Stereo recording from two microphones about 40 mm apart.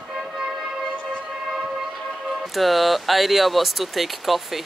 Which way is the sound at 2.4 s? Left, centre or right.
Centre.